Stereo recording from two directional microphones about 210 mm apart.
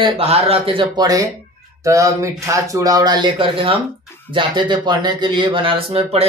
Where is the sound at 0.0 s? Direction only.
30° right (ahead or behind).